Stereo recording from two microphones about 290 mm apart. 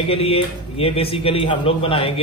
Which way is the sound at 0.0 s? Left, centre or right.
Centre.